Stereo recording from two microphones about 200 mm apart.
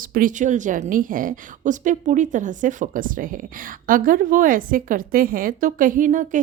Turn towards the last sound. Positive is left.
turn(degrees=-40)  # may be behind; listen again after turning